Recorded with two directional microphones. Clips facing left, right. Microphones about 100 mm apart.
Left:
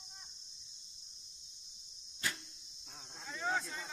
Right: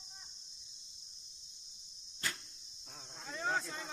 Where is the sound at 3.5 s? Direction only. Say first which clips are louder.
Even; 40° right (ahead or behind).